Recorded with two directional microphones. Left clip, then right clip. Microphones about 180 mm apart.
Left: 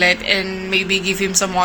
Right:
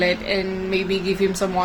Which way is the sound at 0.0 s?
20° right (ahead or behind).